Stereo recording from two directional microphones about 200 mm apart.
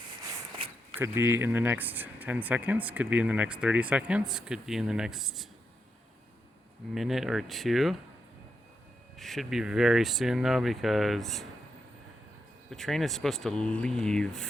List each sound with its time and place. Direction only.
0.5 s a sound: 25° right (ahead or behind)
0.9 s speech: 10° right (ahead or behind)
6.9 s speech: centre (ahead or behind)
9.1 s speech: centre (ahead or behind)
12.7 s speech: centre (ahead or behind)